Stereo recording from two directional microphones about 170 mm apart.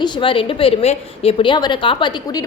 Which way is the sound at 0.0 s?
30° left (ahead or behind).